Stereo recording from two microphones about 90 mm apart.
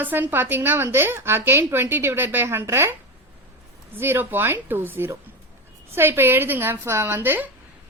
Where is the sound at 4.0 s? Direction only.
25° right (ahead or behind).